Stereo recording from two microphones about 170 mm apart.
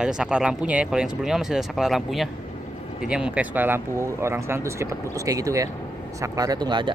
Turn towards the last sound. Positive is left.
turn(degrees=-25)  # may be behind; listen again after turning